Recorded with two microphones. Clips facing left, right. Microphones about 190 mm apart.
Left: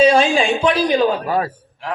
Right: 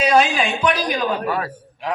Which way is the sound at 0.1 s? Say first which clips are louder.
Left 2 dB; 30° left (ahead or behind).